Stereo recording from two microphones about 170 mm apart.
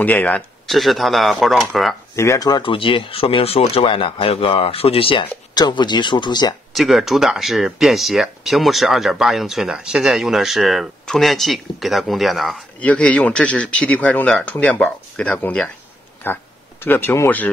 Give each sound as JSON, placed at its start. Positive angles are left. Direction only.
{"t": 0.0, "sound": "speech", "side_deg": 10}
{"t": 2.1, "sound": "speech", "side_deg": 20}
{"t": 6.7, "sound": "speech", "side_deg": 0}